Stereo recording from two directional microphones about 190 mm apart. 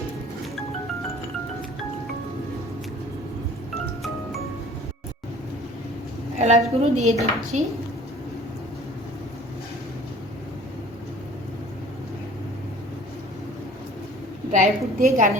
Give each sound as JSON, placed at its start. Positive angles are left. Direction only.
{"t": 6.4, "sound": "a woman's voice", "side_deg": -35}
{"t": 14.5, "sound": "a woman's voice", "side_deg": -45}